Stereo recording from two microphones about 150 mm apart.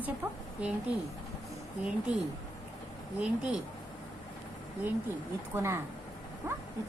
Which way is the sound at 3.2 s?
5° right (ahead or behind).